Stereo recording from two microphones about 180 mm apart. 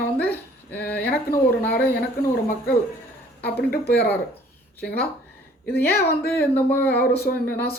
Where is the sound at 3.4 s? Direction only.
60° left (ahead or behind).